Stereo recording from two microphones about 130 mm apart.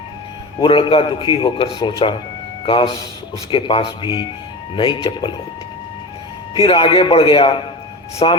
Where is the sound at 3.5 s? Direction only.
40° left (ahead or behind).